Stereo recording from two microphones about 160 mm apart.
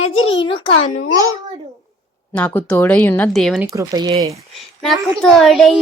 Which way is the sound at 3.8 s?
20° right (ahead or behind).